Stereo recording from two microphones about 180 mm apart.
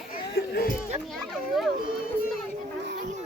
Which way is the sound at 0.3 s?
65° left (ahead or behind).